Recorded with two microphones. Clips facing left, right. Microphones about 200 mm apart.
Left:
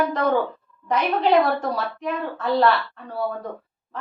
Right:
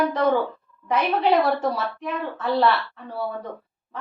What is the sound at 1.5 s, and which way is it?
A woman's voice, centre (ahead or behind).